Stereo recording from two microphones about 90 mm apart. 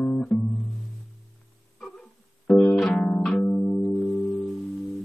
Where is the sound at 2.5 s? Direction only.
10° left (ahead or behind).